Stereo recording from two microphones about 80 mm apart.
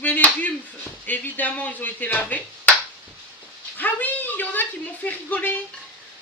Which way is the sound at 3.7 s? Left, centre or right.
Left.